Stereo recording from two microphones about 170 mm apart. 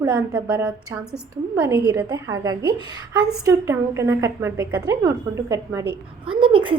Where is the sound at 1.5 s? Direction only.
20° right (ahead or behind).